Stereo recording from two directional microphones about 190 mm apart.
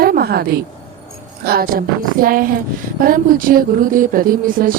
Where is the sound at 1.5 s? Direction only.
50° right (ahead or behind).